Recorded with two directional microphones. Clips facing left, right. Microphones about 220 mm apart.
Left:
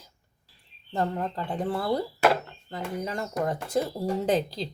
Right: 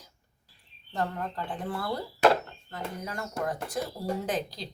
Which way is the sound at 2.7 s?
20° left (ahead or behind).